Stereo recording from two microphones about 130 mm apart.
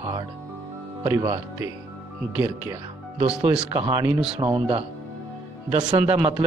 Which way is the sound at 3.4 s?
50° right (ahead or behind).